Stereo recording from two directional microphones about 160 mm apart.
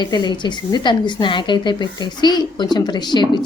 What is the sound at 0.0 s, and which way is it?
A woman's voice, 25° left (ahead or behind).